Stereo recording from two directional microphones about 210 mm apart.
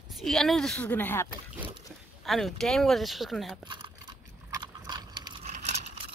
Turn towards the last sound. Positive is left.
turn(degrees=-35)  # may be behind; listen again after turning